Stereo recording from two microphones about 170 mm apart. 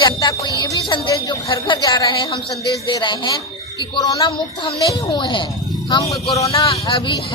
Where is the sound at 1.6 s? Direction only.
25° left (ahead or behind).